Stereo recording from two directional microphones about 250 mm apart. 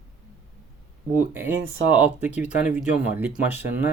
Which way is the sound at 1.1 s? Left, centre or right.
Centre.